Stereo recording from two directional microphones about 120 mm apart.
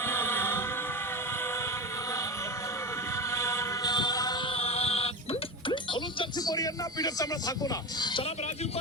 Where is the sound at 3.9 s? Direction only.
35° left (ahead or behind).